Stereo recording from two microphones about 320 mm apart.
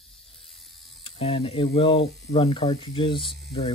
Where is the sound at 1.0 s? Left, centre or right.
Centre.